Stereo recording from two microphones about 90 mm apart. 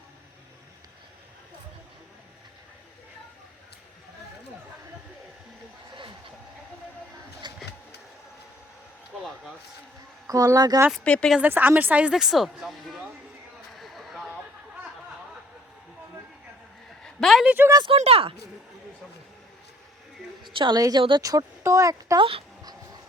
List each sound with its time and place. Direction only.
7.4 s a sound: 55° right (ahead or behind)
10.2 s speech: 40° right (ahead or behind)
11.0 s speech: 15° left (ahead or behind)
11.3 s speech: 20° right (ahead or behind); by 13.1 s centre (ahead or behind)
13.7 s a sound: centre (ahead or behind)
17.0 s a sound: centre (ahead or behind)
17.4 s speech: 20° right (ahead or behind)
17.8 s speech: 90° right
20.5 s a woman's voice: 70° right (ahead or behind)
20.7 s speech: 45° right (ahead or behind)
22.2 s speech: 90° right